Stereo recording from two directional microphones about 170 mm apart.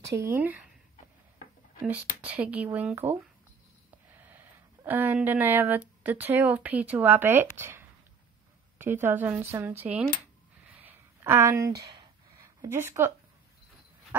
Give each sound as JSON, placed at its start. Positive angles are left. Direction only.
{"t": 0.2, "sound": "speech", "side_deg": -10}
{"t": 1.9, "sound": "speech", "side_deg": -10}
{"t": 4.8, "sound": "speech", "side_deg": -10}
{"t": 10.8, "sound": "a sound", "side_deg": -10}